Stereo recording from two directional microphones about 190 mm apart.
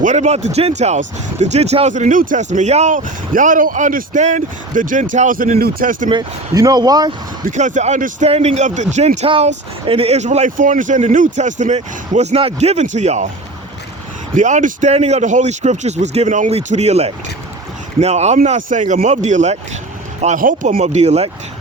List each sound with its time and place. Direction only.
0.0 s speech: 40° right (ahead or behind)
6.1 s speech: 20° right (ahead or behind)
7.4 s speech: 40° right (ahead or behind)
14.3 s speech: 40° right (ahead or behind)